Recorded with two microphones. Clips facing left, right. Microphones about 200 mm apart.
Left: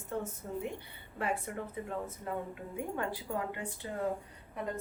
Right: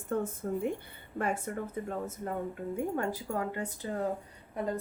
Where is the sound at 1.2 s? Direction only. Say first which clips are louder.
Right 3 dB; 45° right (ahead or behind).